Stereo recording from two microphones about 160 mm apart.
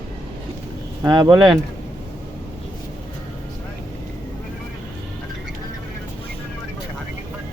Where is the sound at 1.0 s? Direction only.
25° right (ahead or behind).